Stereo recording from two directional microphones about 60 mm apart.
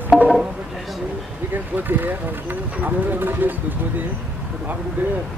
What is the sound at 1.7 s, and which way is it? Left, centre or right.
Speech, right.